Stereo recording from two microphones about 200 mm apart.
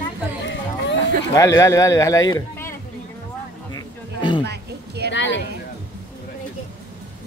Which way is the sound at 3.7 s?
25° left (ahead or behind).